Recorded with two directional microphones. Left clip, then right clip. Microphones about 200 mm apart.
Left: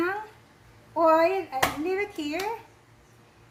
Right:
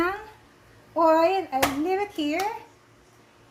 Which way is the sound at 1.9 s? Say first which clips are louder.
Right 3 dB; 45° right (ahead or behind).